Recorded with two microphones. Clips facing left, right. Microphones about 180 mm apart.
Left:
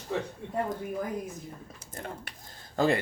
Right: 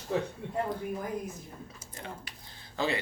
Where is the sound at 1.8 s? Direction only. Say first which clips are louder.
Left 5 dB; 50° left (ahead or behind).